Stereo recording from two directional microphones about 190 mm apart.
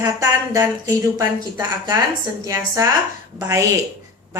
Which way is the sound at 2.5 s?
15° right (ahead or behind).